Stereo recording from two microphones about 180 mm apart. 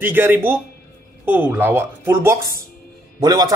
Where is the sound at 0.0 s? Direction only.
10° right (ahead or behind).